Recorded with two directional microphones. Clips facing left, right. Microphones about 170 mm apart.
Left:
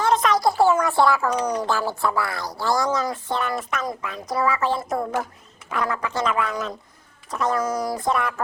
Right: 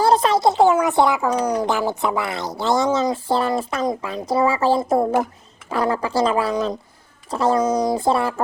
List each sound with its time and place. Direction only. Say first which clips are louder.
0.0 s speech: right 4 dB; 30° right (ahead or behind)